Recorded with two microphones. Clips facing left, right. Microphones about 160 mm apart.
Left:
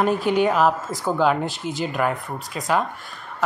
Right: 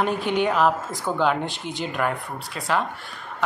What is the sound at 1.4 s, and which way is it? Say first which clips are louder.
Speech: left 3 dB; 45° left (ahead or behind).